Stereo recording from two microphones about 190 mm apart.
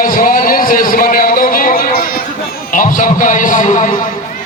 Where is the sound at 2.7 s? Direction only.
45° left (ahead or behind).